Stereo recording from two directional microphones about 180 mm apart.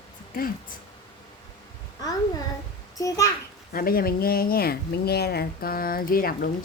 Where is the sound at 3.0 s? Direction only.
20° left (ahead or behind).